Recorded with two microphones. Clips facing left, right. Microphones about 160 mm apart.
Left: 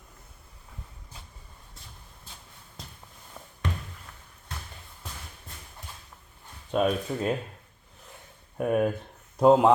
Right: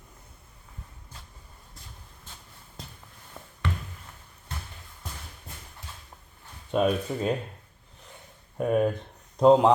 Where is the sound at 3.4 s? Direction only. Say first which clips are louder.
Right 1 dB; centre (ahead or behind).